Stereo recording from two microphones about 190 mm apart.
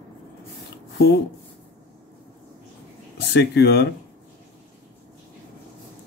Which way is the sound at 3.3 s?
60° left (ahead or behind).